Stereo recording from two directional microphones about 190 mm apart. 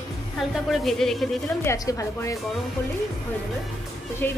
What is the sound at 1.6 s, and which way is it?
Speech, 15° left (ahead or behind).